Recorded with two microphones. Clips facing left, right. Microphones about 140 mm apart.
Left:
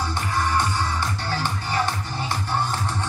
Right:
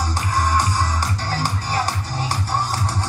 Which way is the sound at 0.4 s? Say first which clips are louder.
Right 3 dB; 40° right (ahead or behind).